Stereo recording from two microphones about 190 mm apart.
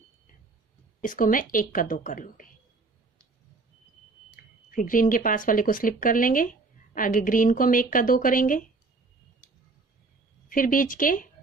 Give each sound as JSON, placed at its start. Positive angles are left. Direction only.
{"t": 1.0, "sound": "speech", "side_deg": 45}
{"t": 4.4, "sound": "speech", "side_deg": 45}
{"t": 10.5, "sound": "speech", "side_deg": 45}